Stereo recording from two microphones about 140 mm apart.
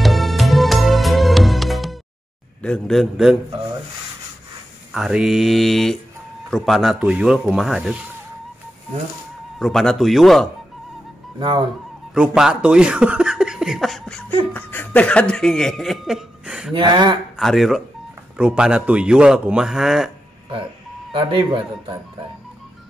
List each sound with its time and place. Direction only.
0.0 s music: centre (ahead or behind)
2.6 s speech: 5° left (ahead or behind)
4.9 s speech: 5° right (ahead or behind)
9.6 s speech: centre (ahead or behind)
11.3 s speech: 35° right (ahead or behind)
12.1 s speech: 5° right (ahead or behind)
16.7 s speech: 35° right (ahead or behind)
17.4 s a man's voice: centre (ahead or behind)
21.1 s speech: 35° right (ahead or behind)